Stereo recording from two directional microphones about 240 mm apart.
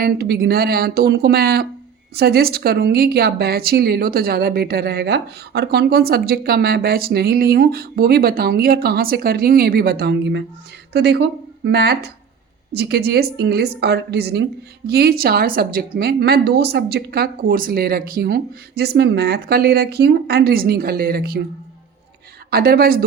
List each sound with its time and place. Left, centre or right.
0.0 s a woman's voice: right
22.4 s a woman's voice: right